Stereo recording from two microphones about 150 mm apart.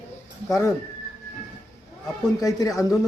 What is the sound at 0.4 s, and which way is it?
Speech, 20° left (ahead or behind).